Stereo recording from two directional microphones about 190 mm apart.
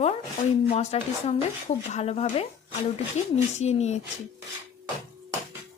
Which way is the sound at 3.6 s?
35° left (ahead or behind).